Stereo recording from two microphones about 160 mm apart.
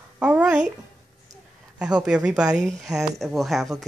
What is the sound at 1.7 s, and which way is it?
Speech, 5° right (ahead or behind).